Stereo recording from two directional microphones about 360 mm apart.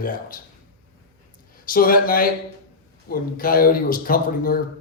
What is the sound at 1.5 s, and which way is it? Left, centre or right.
Speech, left.